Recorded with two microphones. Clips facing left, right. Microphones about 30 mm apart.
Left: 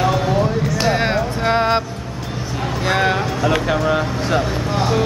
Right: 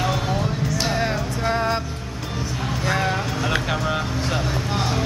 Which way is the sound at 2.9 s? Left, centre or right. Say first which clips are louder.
Left 6 dB; left.